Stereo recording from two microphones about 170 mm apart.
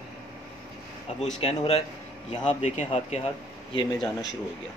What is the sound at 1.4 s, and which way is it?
Speech, 35° left (ahead or behind).